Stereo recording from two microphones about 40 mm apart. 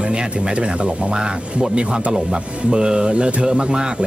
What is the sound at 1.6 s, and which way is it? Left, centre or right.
Speech, right.